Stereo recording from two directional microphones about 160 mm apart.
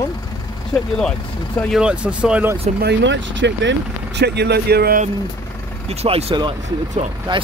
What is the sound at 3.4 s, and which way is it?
Speech, 90° right.